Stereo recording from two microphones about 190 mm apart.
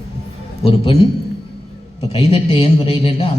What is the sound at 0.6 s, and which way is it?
Speech, 30° left (ahead or behind).